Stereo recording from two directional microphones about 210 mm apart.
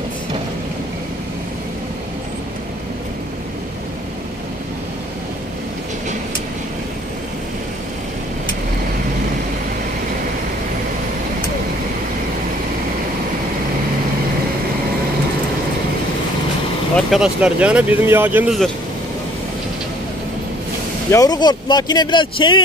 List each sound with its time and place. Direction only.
16.9 s speech: centre (ahead or behind)
21.1 s speech: 20° left (ahead or behind)